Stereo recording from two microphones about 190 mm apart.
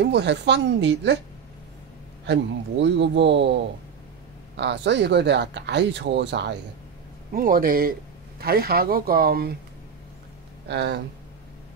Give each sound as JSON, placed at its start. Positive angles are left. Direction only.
{"t": 0.0, "sound": "speech", "side_deg": -65}
{"t": 2.2, "sound": "speech", "side_deg": -65}
{"t": 4.6, "sound": "speech", "side_deg": -65}
{"t": 7.3, "sound": "speech", "side_deg": -50}
{"t": 10.7, "sound": "speech", "side_deg": -65}